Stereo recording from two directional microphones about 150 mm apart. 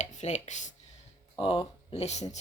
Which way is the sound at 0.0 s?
50° left (ahead or behind).